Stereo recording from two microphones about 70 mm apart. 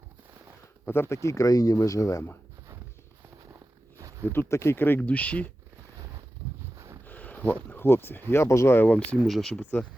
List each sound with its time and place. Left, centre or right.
0.9 s speech: left
4.3 s speech: left
4.9 s speech: left
6.7 s a sound: right
7.0 s a sound: left
7.7 s speech: left
9.2 s speech: centre